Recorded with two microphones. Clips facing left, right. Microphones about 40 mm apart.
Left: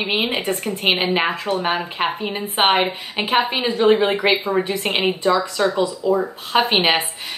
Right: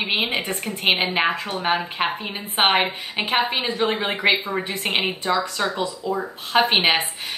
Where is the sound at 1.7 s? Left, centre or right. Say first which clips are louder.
Even; centre.